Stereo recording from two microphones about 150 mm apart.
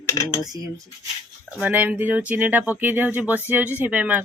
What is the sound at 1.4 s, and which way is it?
Speech, 10° right (ahead or behind).